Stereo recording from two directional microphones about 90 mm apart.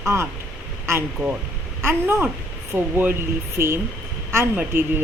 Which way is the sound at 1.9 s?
25° right (ahead or behind).